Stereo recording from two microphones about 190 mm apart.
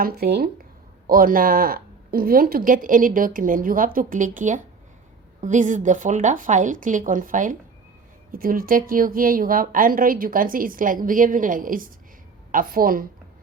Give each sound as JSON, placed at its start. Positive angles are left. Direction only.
{"t": 0.0, "sound": "speech", "side_deg": -55}